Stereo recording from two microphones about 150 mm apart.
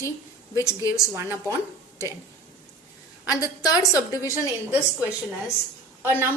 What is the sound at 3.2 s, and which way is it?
A woman's voice, 25° left (ahead or behind).